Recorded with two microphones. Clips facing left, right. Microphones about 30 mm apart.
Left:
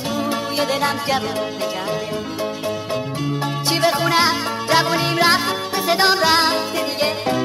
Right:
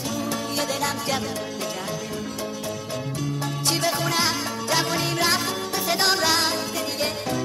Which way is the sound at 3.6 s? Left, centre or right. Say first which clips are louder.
Left 6 dB; left.